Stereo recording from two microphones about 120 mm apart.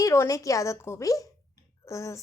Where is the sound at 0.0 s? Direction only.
25° left (ahead or behind).